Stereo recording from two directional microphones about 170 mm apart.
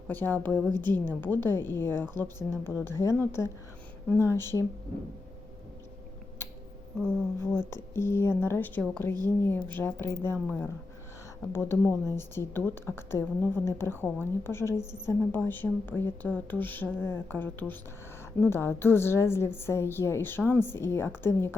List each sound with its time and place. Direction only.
0.1 s a woman's voice: 10° left (ahead or behind)
7.3 s a woman's voice: 15° left (ahead or behind)